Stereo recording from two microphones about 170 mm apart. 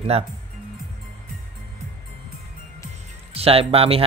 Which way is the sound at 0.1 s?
35° right (ahead or behind).